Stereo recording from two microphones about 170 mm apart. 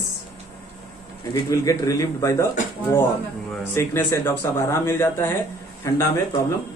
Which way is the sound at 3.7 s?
15° left (ahead or behind).